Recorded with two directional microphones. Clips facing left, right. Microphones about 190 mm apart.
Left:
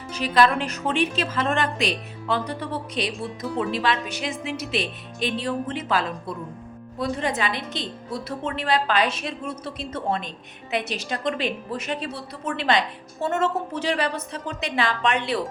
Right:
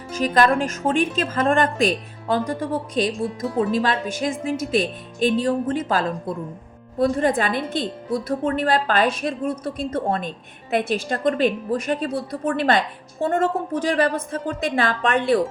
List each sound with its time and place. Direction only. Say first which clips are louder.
0.1 s a woman's voice: right 2 dB; 45° right (ahead or behind)